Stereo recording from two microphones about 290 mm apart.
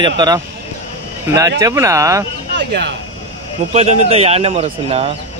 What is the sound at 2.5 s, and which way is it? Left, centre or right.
Speech, right.